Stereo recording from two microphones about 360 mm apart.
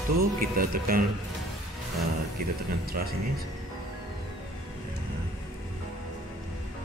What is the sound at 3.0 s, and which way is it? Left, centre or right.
Speech, right.